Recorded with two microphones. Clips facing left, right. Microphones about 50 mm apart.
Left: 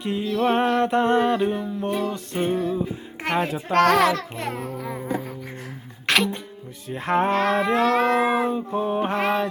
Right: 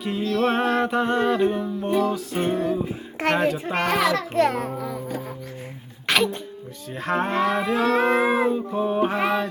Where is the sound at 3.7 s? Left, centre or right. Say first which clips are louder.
Left 8 dB; left.